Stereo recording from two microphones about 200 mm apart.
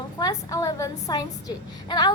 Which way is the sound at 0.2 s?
20° left (ahead or behind).